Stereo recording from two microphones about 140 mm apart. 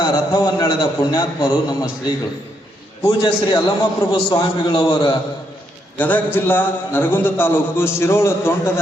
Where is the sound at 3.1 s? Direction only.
30° left (ahead or behind).